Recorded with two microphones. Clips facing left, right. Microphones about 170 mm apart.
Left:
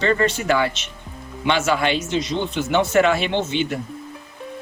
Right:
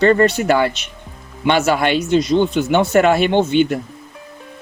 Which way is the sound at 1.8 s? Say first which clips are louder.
Right 6 dB; 50° right (ahead or behind).